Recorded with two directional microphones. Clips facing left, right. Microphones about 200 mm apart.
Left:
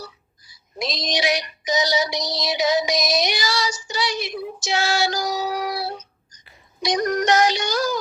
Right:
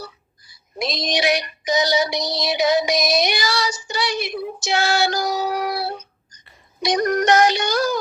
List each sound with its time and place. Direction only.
0.0 s child singing: 60° right (ahead or behind)
6.8 s music: 60° right (ahead or behind)